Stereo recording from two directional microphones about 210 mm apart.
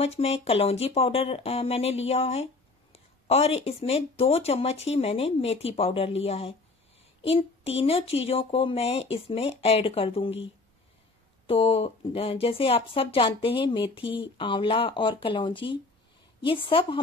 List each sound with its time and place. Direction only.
0.0 s speech: 30° left (ahead or behind)
7.2 s a sound: 30° left (ahead or behind)
7.8 s speech: 25° left (ahead or behind)
11.4 s speech: 25° left (ahead or behind)